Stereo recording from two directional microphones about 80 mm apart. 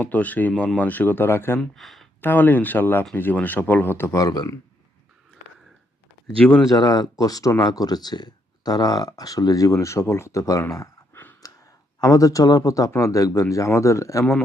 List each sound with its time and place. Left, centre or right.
0.0 s speech: centre
1.7 s speech: centre
2.2 s speech: left
4.2 s speech: left
6.7 s speech: left
7.6 s speech: left
11.1 s a sound: left
11.9 s speech: left